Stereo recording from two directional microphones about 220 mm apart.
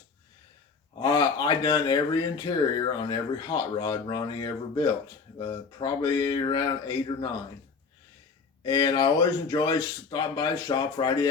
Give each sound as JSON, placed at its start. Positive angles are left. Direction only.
{"t": 0.9, "sound": "speech", "side_deg": 15}
{"t": 8.6, "sound": "speech", "side_deg": 20}